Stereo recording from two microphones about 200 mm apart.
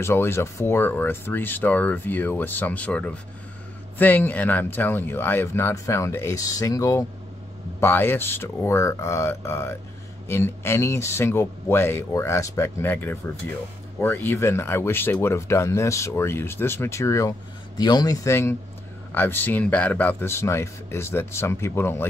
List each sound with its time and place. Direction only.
0.0 s speech: 10° left (ahead or behind)